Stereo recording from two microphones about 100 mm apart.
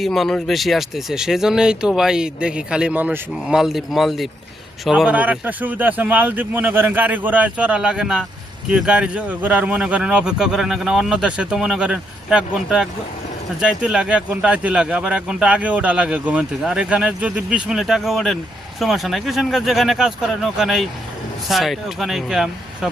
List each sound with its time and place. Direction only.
0.0 s speech: centre (ahead or behind); by 3.2 s 15° right (ahead or behind)
3.4 s speech: 5° right (ahead or behind)